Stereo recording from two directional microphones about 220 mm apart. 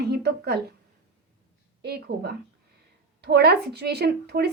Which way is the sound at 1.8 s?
45° right (ahead or behind).